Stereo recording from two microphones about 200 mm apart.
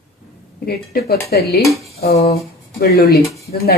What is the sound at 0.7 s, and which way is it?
Speech, 50° left (ahead or behind).